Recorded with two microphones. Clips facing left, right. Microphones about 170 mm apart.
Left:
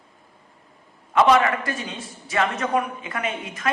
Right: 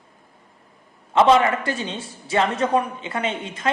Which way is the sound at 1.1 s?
25° right (ahead or behind).